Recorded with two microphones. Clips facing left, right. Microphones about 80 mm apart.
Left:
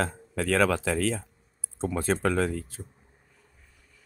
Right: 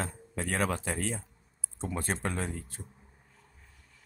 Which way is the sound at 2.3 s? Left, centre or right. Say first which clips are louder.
Left 9 dB; left.